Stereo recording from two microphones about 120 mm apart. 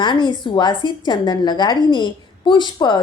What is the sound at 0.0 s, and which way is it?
A woman's voice, 40° left (ahead or behind).